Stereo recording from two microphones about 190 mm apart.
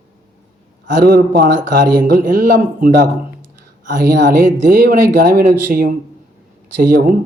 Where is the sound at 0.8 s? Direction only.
50° right (ahead or behind).